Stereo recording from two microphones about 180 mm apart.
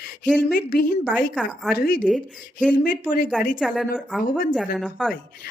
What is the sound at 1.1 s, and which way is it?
Speech, centre (ahead or behind).